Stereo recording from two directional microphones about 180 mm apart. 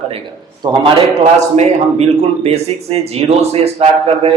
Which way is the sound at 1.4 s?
35° right (ahead or behind).